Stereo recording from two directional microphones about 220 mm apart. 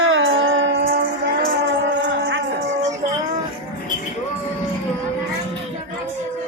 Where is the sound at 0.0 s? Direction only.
65° right (ahead or behind).